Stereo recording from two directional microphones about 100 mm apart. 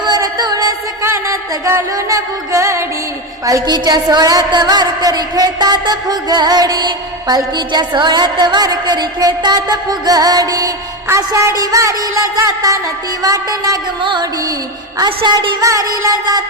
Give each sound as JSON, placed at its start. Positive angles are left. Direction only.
{"t": 0.0, "sound": "music", "side_deg": -45}
{"t": 1.0, "sound": "music", "side_deg": -30}
{"t": 3.4, "sound": "a sound", "side_deg": -40}
{"t": 11.2, "sound": "music", "side_deg": -40}
{"t": 14.0, "sound": "a sound", "side_deg": -55}
{"t": 15.6, "sound": "music", "side_deg": -35}